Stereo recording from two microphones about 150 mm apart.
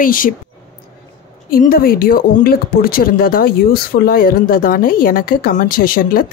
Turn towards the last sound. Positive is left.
turn(degrees=75)  # may be behind; listen again after turning